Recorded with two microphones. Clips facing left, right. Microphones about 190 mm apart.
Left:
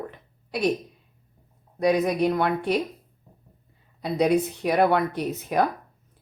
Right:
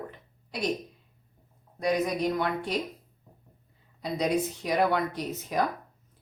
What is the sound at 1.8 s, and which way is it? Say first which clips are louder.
Speech: left 5 dB; 60° left (ahead or behind).